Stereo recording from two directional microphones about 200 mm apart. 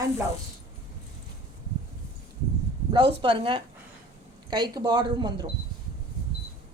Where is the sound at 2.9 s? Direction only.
25° right (ahead or behind).